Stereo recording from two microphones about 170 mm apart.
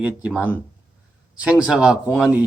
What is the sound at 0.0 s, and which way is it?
Speech, 5° right (ahead or behind).